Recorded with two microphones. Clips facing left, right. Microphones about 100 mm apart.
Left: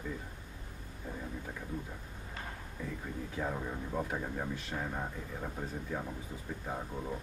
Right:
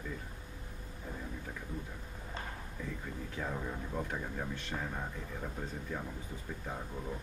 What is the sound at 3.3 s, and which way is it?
Speech, 10° left (ahead or behind).